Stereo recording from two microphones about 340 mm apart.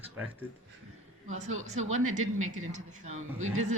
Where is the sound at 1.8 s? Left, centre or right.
Right.